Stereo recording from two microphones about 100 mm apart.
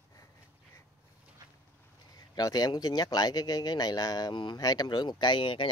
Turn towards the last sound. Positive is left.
turn(degrees=55)  # may be behind; listen again after turning